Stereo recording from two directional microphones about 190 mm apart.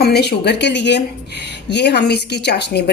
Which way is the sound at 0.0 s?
60° left (ahead or behind).